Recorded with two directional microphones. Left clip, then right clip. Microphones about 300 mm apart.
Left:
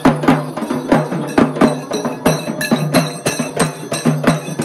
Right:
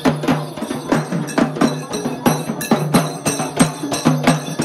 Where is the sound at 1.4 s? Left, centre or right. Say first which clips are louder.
Left 4 dB; left.